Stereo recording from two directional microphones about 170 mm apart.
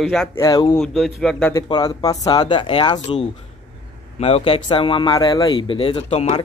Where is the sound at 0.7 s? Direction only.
Centre (ahead or behind).